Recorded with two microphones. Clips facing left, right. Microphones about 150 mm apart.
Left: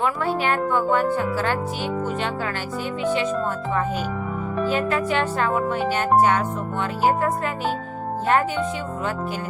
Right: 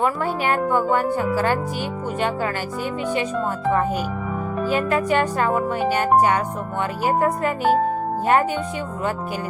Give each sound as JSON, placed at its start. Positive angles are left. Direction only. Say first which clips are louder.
{"t": 0.4, "sound": "speech", "louder": "right 3 dB", "side_deg": -10}
{"t": 4.6, "sound": "speech", "louder": "right 1 dB", "side_deg": -10}
{"t": 7.4, "sound": "speech", "louder": "right 6 dB", "side_deg": -50}